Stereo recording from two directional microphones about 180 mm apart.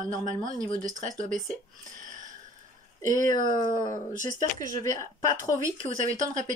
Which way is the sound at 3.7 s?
40° right (ahead or behind).